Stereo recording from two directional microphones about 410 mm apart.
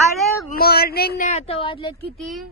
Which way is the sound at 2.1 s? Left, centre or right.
Centre.